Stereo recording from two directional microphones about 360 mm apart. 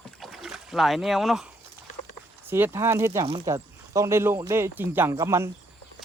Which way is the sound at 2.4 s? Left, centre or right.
Centre.